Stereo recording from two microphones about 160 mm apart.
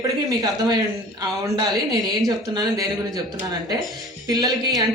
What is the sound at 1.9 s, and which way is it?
Speech, 25° right (ahead or behind).